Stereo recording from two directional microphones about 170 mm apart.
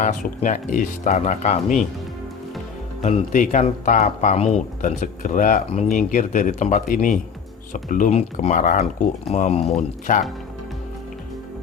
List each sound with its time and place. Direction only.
0.0 s speech: 45° left (ahead or behind)
3.0 s speech: 45° left (ahead or behind)